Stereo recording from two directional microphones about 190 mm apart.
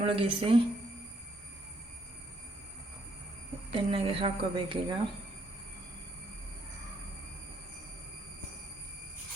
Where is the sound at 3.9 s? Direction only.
30° right (ahead or behind).